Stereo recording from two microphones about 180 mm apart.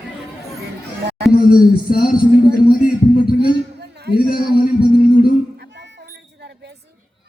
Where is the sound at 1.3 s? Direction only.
55° left (ahead or behind).